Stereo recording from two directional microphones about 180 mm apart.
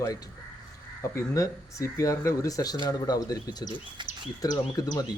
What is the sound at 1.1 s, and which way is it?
Speech, 15° left (ahead or behind).